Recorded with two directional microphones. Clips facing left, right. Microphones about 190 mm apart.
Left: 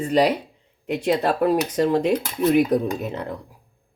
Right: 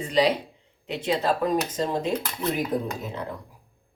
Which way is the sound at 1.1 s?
65° left (ahead or behind).